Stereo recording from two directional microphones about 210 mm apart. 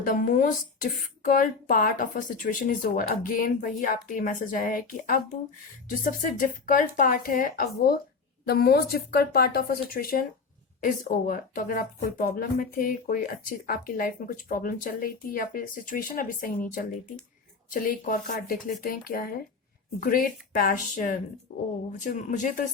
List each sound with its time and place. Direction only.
0.0 s speech: 40° left (ahead or behind)
21.5 s speech: 25° left (ahead or behind)
22.0 s speech: 35° left (ahead or behind)